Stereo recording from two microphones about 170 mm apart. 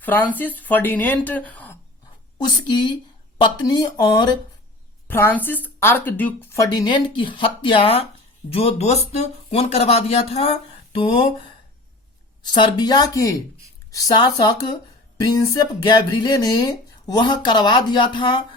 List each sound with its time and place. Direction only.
0.0 s speech: 10° left (ahead or behind)
2.4 s speech: 25° left (ahead or behind)
5.0 s speech: 10° left (ahead or behind); by 11.3 s 30° left (ahead or behind)
12.4 s speech: 25° left (ahead or behind)